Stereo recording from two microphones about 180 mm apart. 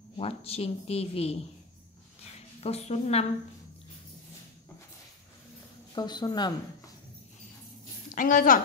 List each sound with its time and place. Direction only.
0.2 s a woman's voice: 35° left (ahead or behind)
2.6 s a woman's voice: 35° left (ahead or behind)
5.9 s speech: 25° left (ahead or behind)
8.1 s a woman's voice: 45° left (ahead or behind)